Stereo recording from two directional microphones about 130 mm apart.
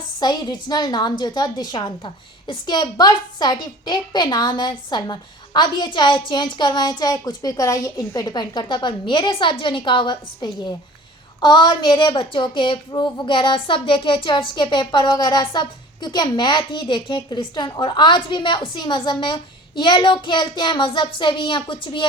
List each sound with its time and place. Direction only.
0.2 s a woman's voice: 35° left (ahead or behind)